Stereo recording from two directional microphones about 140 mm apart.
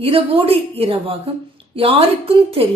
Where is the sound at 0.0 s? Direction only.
40° right (ahead or behind).